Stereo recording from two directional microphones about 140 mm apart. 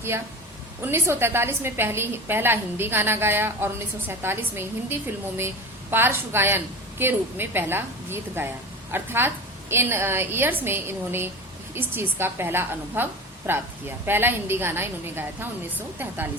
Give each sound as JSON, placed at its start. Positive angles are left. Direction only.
{"t": 0.8, "sound": "a woman's voice", "side_deg": -15}